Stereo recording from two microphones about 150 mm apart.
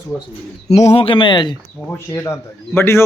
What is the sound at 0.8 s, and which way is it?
Speech, 40° left (ahead or behind).